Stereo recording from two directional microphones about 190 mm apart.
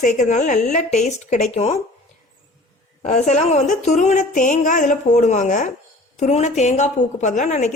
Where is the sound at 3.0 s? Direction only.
40° left (ahead or behind).